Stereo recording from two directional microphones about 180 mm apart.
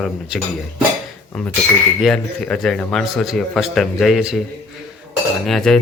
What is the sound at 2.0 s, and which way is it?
A man's voice, 5° left (ahead or behind).